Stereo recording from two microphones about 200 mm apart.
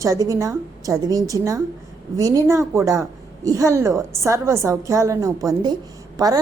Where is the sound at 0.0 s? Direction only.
15° right (ahead or behind).